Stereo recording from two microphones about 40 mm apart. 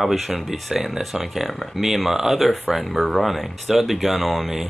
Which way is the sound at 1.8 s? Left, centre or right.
Centre.